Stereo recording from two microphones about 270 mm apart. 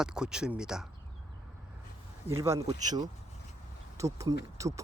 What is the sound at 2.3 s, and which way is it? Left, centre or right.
Speech, centre.